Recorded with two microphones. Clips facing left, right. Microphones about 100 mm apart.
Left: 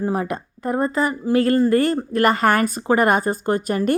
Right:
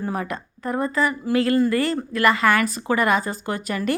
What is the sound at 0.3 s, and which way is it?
Speech, 40° left (ahead or behind).